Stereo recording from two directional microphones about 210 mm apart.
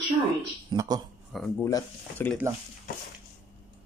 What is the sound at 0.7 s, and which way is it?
Speech, 15° right (ahead or behind).